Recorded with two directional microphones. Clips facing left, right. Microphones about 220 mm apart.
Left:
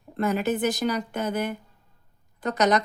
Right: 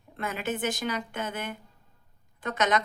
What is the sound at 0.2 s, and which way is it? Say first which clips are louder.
Speech: left 7 dB; 40° left (ahead or behind).